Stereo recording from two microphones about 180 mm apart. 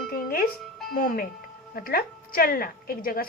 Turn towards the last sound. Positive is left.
turn(degrees=55)  # may be behind; listen again after turning